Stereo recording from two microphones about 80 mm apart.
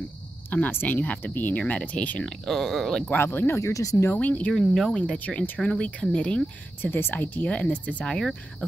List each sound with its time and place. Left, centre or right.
0.5 s speech: left
2.2 s speech: centre
3.1 s speech: left
4.1 s speech: left
4.5 s speech: centre
6.8 s speech: left; by 8.3 s centre